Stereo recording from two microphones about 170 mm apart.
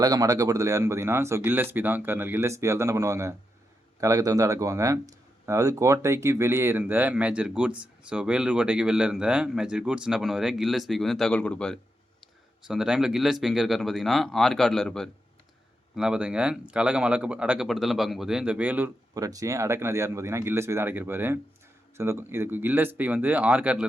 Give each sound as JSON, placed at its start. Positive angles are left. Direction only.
{"t": 0.0, "sound": "speech", "side_deg": -20}
{"t": 19.1, "sound": "speech", "side_deg": -20}